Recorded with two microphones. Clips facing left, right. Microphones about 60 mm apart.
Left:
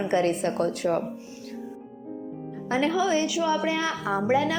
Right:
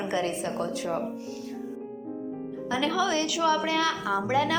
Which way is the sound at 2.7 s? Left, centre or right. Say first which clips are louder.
Left 3 dB; left.